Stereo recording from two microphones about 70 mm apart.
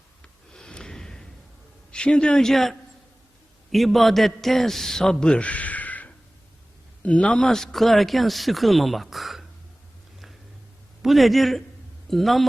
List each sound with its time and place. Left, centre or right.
0.2 s snort: centre
1.9 s a man's voice: centre
7.5 s speech: centre
11.0 s speech: centre